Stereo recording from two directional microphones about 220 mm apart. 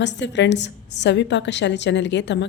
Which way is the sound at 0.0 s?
55° left (ahead or behind).